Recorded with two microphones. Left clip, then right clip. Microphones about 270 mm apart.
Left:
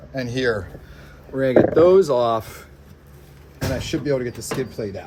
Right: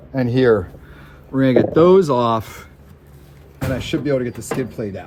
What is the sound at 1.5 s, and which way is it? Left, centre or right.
Speech, right.